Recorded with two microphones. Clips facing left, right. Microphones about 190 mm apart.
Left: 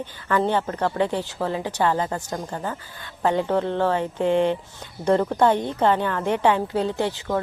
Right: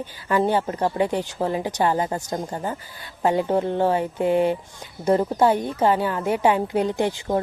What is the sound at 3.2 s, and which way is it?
Speech, 10° right (ahead or behind).